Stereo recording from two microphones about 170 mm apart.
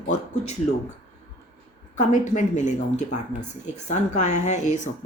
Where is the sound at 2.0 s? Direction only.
50° left (ahead or behind).